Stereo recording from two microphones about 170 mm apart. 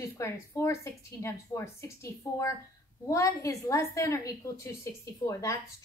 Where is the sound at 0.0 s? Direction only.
15° left (ahead or behind).